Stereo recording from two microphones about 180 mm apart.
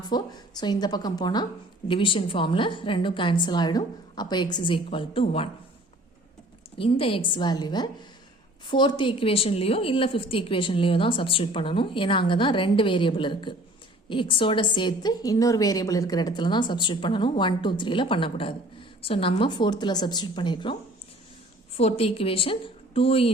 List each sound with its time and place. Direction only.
0.1 s a woman's voice: 25° left (ahead or behind)
6.7 s a woman's voice: 30° left (ahead or behind)
21.8 s a woman's voice: 35° left (ahead or behind)